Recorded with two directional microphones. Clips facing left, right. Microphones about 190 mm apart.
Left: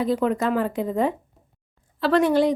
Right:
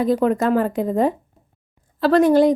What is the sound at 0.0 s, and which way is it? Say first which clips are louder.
A woman's voice: right 4 dB; 45° right (ahead or behind).